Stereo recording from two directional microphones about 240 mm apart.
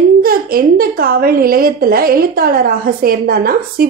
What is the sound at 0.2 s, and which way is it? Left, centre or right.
A woman's voice, right.